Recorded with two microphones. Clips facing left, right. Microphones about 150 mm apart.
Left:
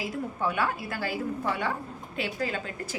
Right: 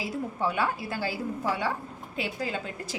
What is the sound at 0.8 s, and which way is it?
Speech, 25° right (ahead or behind).